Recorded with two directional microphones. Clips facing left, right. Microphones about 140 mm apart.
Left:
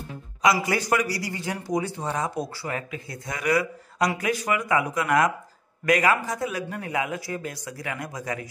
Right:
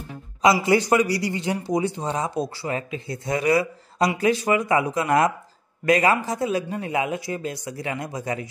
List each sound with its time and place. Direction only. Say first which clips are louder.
0.4 s a man's voice: right 5 dB; 25° right (ahead or behind)